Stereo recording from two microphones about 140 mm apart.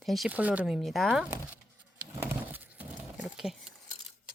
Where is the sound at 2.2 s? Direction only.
15° right (ahead or behind).